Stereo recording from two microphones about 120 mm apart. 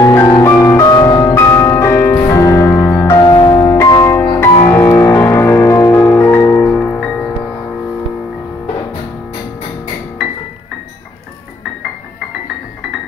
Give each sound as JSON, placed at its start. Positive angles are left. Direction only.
{"t": 0.0, "sound": "music", "side_deg": 25}